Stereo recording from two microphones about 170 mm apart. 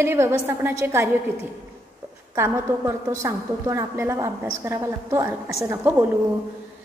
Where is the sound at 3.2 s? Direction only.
15° right (ahead or behind).